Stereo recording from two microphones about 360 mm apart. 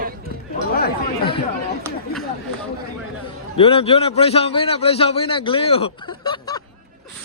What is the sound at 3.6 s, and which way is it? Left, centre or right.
A man's voice, centre.